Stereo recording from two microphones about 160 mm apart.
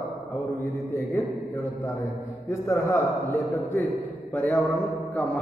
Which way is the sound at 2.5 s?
15° left (ahead or behind).